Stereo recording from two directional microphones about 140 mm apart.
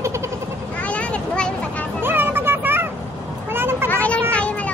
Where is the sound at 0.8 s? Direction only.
10° left (ahead or behind).